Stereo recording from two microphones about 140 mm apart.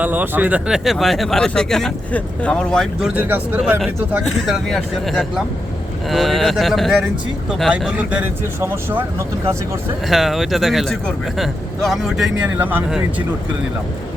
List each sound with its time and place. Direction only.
0.0 s speech: 10° right (ahead or behind); by 2.8 s 5° left (ahead or behind)
3.0 s speech: 10° right (ahead or behind)
10.1 s speech: centre (ahead or behind)
12.5 s speech: 15° right (ahead or behind)